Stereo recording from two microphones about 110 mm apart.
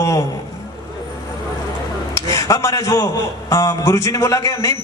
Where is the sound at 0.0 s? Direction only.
30° left (ahead or behind).